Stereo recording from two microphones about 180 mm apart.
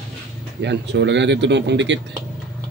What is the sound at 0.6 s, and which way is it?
Speech, 70° right (ahead or behind).